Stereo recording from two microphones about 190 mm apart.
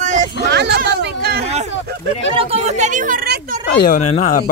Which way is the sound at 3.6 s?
55° left (ahead or behind).